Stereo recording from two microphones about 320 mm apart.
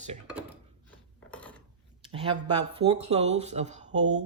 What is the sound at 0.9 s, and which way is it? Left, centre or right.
Gears, centre.